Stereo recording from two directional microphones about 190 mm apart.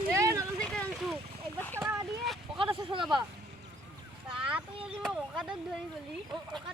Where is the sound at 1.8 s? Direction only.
10° right (ahead or behind).